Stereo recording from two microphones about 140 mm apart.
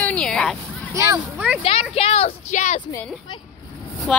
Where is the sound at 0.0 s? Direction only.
5° left (ahead or behind).